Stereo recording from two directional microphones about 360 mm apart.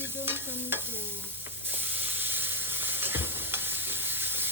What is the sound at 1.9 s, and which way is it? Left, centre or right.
Stir, centre.